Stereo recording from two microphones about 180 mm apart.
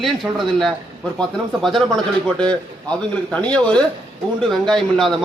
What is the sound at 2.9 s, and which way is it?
Speech, 5° left (ahead or behind).